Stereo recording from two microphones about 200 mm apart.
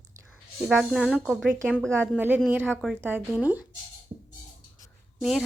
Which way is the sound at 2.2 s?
10° right (ahead or behind).